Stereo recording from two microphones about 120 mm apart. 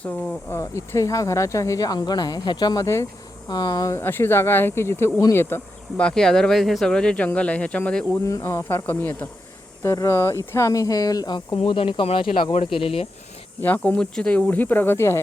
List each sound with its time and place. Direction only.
0.5 s speech: 25° left (ahead or behind)
6.0 s speech: 5° left (ahead or behind)
8.2 s speech: 20° left (ahead or behind)
11.5 s speech: 50° left (ahead or behind)
13.6 s speech: 15° left (ahead or behind)